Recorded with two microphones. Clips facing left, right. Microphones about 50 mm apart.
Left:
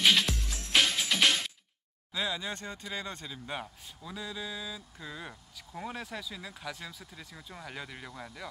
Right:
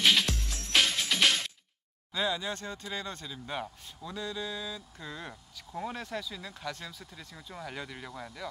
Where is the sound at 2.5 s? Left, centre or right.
Centre.